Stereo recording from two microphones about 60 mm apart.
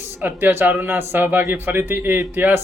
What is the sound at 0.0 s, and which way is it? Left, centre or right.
A man's voice, right.